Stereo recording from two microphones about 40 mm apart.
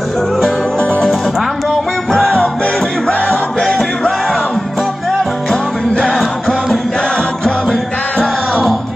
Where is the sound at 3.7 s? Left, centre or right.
Centre.